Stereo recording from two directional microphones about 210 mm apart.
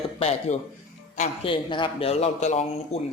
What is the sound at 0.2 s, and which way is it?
A man's voice, 30° left (ahead or behind).